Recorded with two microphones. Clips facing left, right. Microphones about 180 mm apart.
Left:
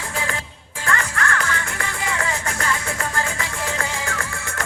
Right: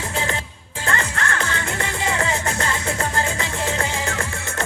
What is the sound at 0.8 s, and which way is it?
Music, 25° right (ahead or behind).